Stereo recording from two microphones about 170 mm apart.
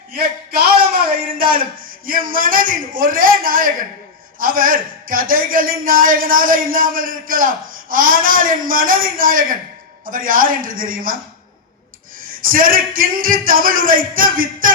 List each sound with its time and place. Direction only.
0.1 s a sound: 60° right (ahead or behind)
2.0 s a man's voice: 55° right (ahead or behind)
12.3 s a man's voice: 55° right (ahead or behind)